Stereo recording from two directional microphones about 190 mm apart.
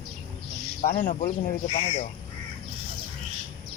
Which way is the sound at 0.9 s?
45° left (ahead or behind).